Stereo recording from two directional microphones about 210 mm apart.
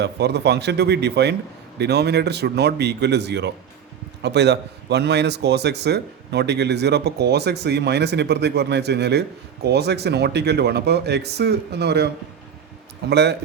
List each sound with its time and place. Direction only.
0.0 s a man's voice: 50° right (ahead or behind)